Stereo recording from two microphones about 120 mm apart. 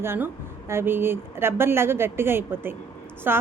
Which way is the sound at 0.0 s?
20° right (ahead or behind).